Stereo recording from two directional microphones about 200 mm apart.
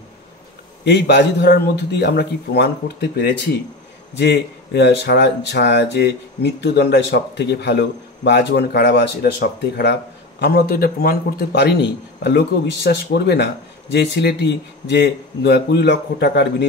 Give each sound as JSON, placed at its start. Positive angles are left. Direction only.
{"t": 0.8, "sound": "a man's voice", "side_deg": 60}
{"t": 4.1, "sound": "a man's voice", "side_deg": 60}